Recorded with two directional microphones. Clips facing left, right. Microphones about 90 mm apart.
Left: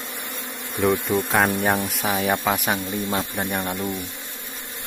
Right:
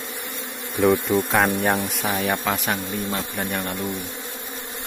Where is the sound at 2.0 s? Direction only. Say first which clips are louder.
Left 2 dB; 5° left (ahead or behind).